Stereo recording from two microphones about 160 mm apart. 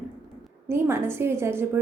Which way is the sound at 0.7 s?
15° right (ahead or behind).